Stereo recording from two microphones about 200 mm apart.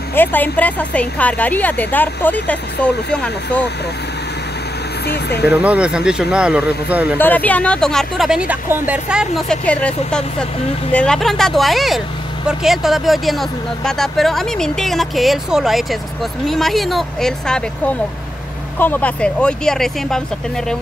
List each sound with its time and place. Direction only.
0.1 s speech: 10° left (ahead or behind)
5.0 s speech: 55° left (ahead or behind)
5.5 s speech: 5° right (ahead or behind)
7.2 s speech: 10° left (ahead or behind)
9.7 s speech: 5° left (ahead or behind)